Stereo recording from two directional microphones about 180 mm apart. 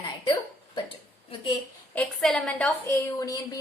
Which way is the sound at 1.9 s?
5° left (ahead or behind).